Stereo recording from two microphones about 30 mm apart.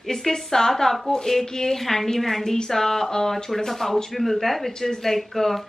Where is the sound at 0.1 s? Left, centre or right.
Centre.